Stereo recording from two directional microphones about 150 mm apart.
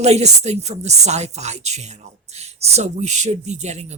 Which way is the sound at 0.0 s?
45° right (ahead or behind).